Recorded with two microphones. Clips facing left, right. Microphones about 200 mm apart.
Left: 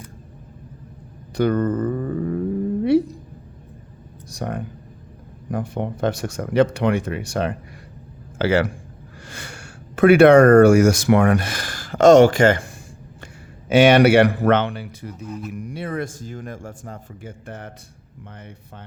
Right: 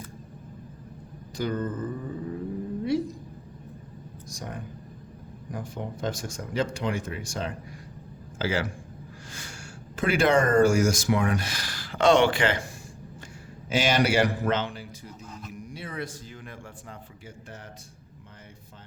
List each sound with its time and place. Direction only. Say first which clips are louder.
1.4 s speech: left 10 dB; 65° left (ahead or behind)
4.3 s speech: left 10 dB; 65° left (ahead or behind); by 12.6 s 45° left (ahead or behind)
13.7 s speech: left 11 dB; 60° left (ahead or behind)